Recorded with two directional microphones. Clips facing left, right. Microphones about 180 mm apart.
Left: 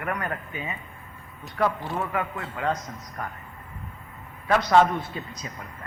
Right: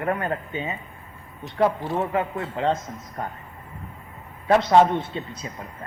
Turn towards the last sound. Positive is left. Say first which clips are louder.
# right 3 dB
turn(degrees=-25)  # may be behind; listen again after turning